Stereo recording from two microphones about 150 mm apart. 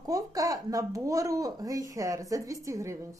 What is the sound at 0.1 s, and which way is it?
A woman's voice, 25° right (ahead or behind).